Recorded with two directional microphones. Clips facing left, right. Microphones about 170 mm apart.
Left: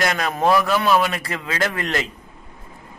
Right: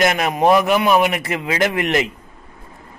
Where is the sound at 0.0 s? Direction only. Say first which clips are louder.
Right 4 dB; 20° right (ahead or behind).